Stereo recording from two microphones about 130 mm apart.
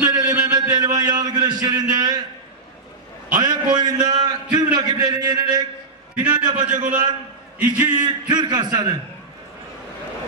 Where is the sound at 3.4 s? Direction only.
30° right (ahead or behind).